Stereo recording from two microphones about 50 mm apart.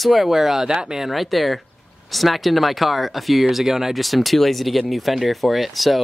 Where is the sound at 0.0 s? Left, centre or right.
Centre.